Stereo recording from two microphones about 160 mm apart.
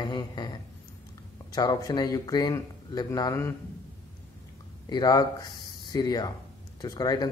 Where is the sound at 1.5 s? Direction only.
25° left (ahead or behind).